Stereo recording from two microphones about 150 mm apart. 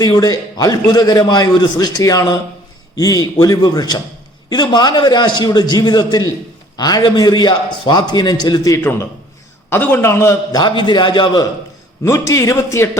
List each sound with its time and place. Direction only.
0.0 s a man's voice: 25° left (ahead or behind)
8.8 s a man's voice: 15° left (ahead or behind); by 11.4 s 30° left (ahead or behind)
12.0 s a man's voice: 20° left (ahead or behind)